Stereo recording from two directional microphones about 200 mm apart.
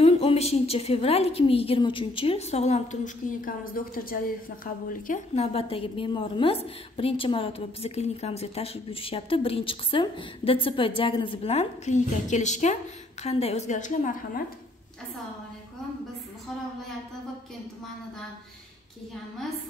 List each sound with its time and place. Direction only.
0.0 s a woman's voice: 30° left (ahead or behind)